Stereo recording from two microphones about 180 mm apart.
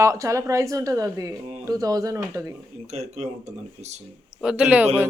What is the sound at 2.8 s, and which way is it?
Speech, 35° right (ahead or behind).